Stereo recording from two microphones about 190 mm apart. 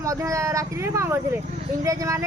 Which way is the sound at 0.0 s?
15° right (ahead or behind).